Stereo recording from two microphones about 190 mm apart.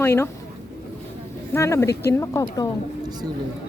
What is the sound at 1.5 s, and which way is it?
Speech, 15° left (ahead or behind).